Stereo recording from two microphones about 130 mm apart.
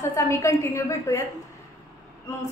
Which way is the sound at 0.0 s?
20° left (ahead or behind).